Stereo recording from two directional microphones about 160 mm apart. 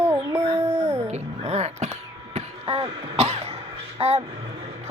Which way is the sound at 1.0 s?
45° right (ahead or behind).